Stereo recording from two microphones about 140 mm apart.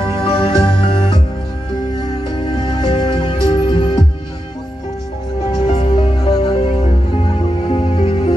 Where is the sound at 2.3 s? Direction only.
35° left (ahead or behind).